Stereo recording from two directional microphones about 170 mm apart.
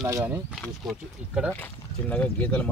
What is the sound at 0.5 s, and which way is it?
Speech, centre (ahead or behind).